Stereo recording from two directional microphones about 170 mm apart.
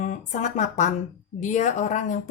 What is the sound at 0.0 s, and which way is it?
A woman's voice, 45° left (ahead or behind).